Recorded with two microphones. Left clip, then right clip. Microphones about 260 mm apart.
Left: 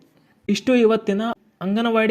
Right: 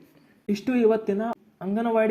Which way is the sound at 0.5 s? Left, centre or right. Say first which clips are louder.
Left 5 dB; left.